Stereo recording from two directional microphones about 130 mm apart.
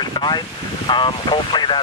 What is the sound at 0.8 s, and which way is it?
Speech, 40° left (ahead or behind).